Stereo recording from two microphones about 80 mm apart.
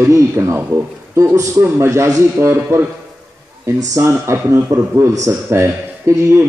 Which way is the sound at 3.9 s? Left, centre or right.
Right.